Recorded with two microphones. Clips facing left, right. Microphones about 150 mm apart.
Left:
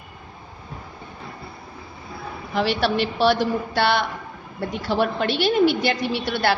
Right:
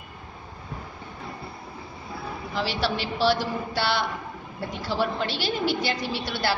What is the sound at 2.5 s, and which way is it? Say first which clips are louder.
A woman's voice: left 6 dB; 60° left (ahead or behind).